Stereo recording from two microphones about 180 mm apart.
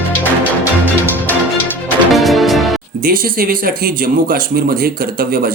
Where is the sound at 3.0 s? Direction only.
50° right (ahead or behind).